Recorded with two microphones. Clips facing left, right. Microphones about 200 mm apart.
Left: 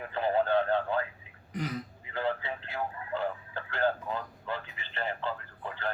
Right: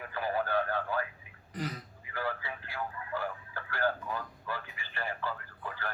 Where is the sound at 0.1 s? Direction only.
25° left (ahead or behind).